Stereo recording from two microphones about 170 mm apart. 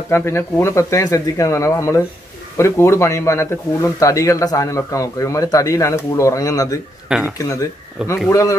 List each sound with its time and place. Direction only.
0.1 s a man's voice: 15° left (ahead or behind)
7.1 s speech: 5° right (ahead or behind)
7.3 s a man's voice: 20° left (ahead or behind)